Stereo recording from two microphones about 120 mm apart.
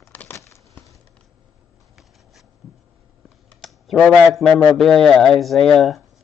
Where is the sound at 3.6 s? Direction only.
Centre (ahead or behind).